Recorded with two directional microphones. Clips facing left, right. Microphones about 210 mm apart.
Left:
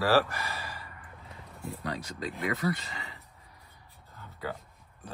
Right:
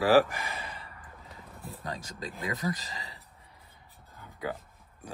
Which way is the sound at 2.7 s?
35° right (ahead or behind).